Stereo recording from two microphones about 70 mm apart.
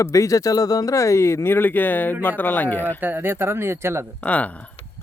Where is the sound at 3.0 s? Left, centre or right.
Right.